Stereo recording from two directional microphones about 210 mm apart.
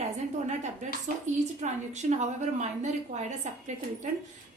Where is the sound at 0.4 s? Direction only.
35° right (ahead or behind).